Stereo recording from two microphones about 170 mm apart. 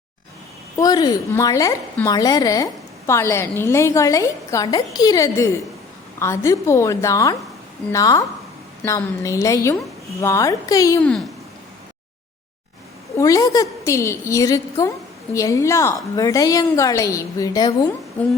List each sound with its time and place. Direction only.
0.8 s a woman's voice: 20° left (ahead or behind)
13.1 s a woman's voice: 20° left (ahead or behind)
18.2 s a woman's voice: 10° left (ahead or behind)